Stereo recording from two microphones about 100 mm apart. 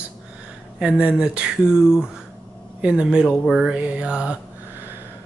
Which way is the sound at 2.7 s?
10° right (ahead or behind).